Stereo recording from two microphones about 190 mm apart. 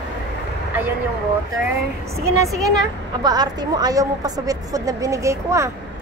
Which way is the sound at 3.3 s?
20° right (ahead or behind).